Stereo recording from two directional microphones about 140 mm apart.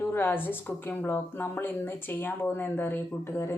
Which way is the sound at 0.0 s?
15° left (ahead or behind).